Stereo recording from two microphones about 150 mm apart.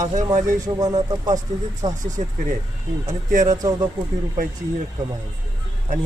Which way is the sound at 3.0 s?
55° right (ahead or behind).